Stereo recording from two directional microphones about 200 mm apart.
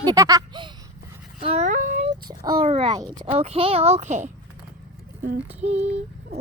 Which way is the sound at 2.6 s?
30° right (ahead or behind).